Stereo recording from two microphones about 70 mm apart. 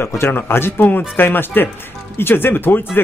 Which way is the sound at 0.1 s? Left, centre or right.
Left.